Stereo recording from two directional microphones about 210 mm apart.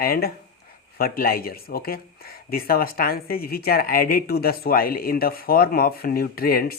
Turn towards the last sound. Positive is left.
turn(degrees=45)  # may be behind; listen again after turning